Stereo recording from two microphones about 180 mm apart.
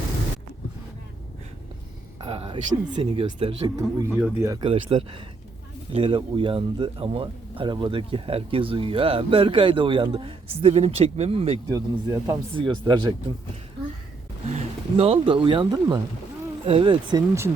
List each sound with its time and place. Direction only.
2.2 s speech: 30° right (ahead or behind)
3.8 s speech: 15° right (ahead or behind)
4.6 s speech: 30° right (ahead or behind)
11.7 s speech: 20° right (ahead or behind)
14.5 s speech: 30° right (ahead or behind); by 17.5 s 15° right (ahead or behind)